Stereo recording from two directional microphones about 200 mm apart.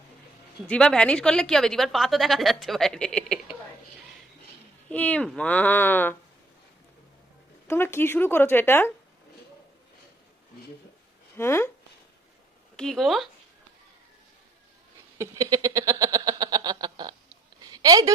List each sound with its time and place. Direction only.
0.7 s a woman's voice: 5° left (ahead or behind)
4.9 s speech: 5° left (ahead or behind)
7.7 s speech: 10° left (ahead or behind)
11.3 s speech: 10° left (ahead or behind)
12.7 s a woman's voice: centre (ahead or behind)
15.2 s a sound: 15° right (ahead or behind)